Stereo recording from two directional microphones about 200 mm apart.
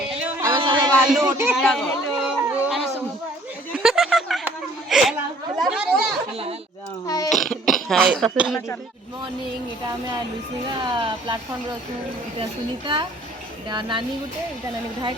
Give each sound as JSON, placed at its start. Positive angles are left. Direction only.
{"t": 0.5, "sound": "a sound", "side_deg": -25}
{"t": 1.2, "sound": "speech", "side_deg": -15}
{"t": 1.5, "sound": "a sound", "side_deg": 0}
{"t": 5.5, "sound": "chatter", "side_deg": 0}
{"t": 7.3, "sound": "burping", "side_deg": 0}
{"t": 7.7, "sound": "speech", "side_deg": 0}
{"t": 10.8, "sound": "a woman's voice", "side_deg": -25}
{"t": 12.4, "sound": "a woman's voice", "side_deg": -25}